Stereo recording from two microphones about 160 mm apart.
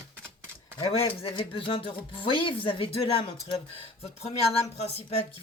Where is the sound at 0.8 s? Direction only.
35° left (ahead or behind).